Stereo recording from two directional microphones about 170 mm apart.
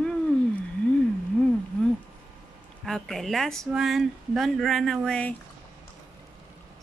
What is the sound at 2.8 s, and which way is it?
Speech, centre (ahead or behind).